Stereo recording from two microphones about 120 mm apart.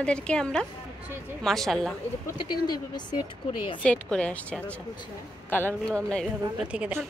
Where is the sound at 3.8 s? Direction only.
10° left (ahead or behind).